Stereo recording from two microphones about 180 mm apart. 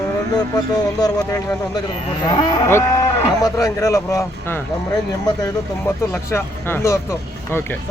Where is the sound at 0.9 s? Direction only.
20° left (ahead or behind).